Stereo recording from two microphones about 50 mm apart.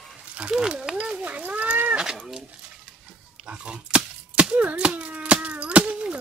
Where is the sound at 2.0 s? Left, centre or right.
Centre.